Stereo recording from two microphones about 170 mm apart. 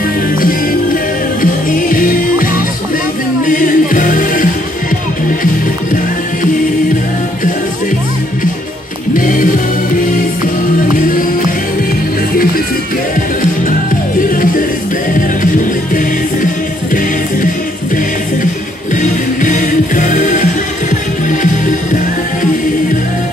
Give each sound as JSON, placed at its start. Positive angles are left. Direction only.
{"t": 1.4, "sound": "music", "side_deg": 55}
{"t": 9.1, "sound": "music", "side_deg": 50}
{"t": 14.3, "sound": "music", "side_deg": 55}
{"t": 18.9, "sound": "music", "side_deg": 50}